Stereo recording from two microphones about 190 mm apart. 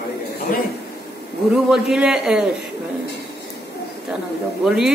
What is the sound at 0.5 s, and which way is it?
Speech, 45° left (ahead or behind).